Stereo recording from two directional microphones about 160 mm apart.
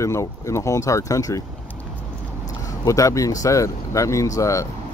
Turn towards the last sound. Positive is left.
turn(degrees=20)  # may be behind; listen again after turning